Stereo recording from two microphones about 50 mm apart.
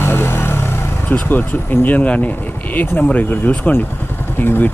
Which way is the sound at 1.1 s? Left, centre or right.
Left.